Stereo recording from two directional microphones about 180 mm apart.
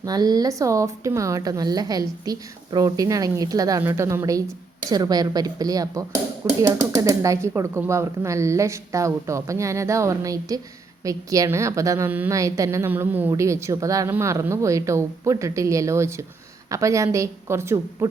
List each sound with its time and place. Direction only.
0.0 s speech: 20° right (ahead or behind)